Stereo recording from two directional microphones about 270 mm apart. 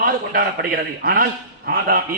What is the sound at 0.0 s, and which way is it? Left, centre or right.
A man's voice, right.